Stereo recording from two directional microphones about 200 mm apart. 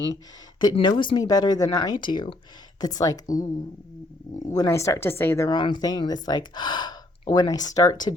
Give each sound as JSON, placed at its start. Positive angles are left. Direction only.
{"t": 0.6, "sound": "speech", "side_deg": 25}
{"t": 4.4, "sound": "speech", "side_deg": 15}